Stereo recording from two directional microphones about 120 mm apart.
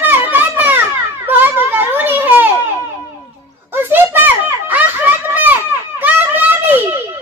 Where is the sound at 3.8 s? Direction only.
20° right (ahead or behind).